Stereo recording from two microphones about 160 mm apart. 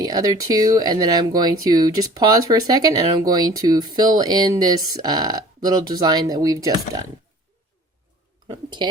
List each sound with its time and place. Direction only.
0.0 s speech: 25° right (ahead or behind)
8.4 s speech: 30° right (ahead or behind)